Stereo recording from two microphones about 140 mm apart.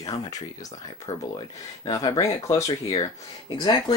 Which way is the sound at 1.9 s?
25° left (ahead or behind).